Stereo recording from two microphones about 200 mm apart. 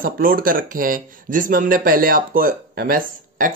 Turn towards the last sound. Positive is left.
turn(degrees=-45)  # may be behind; listen again after turning